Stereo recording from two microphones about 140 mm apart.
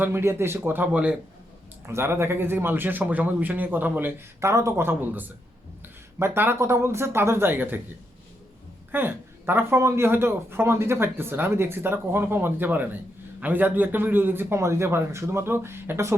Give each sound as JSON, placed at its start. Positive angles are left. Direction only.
{"t": 0.0, "sound": "speech", "side_deg": -15}
{"t": 8.9, "sound": "speech", "side_deg": -15}